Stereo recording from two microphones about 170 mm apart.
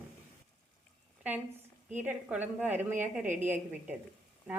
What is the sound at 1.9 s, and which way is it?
A woman's voice, 10° right (ahead or behind).